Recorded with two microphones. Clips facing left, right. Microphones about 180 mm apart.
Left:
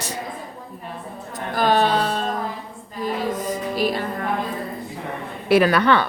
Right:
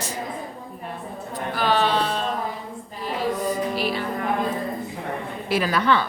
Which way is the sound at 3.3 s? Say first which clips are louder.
Right 1 dB; 45° left (ahead or behind).